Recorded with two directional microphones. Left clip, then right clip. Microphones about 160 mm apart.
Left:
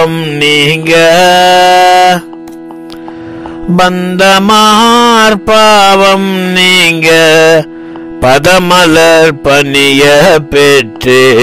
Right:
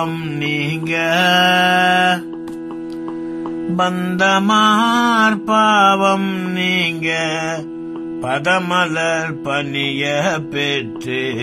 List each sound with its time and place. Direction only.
0.1 s mantra: 45° left (ahead or behind)
0.4 s mantra: 60° left (ahead or behind)
3.9 s music: 40° left (ahead or behind)
4.2 s mantra: 55° left (ahead or behind)
6.5 s mantra: 65° left (ahead or behind)